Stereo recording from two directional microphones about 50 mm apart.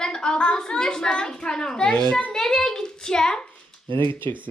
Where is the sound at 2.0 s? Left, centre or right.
Left.